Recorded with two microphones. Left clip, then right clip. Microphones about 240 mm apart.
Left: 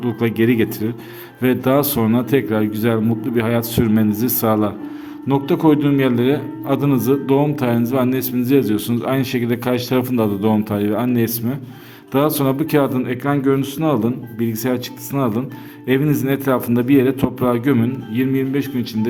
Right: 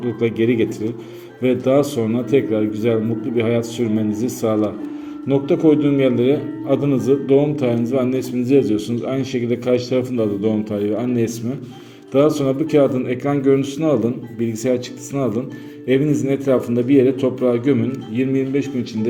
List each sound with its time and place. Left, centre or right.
0.0 s a man's voice: left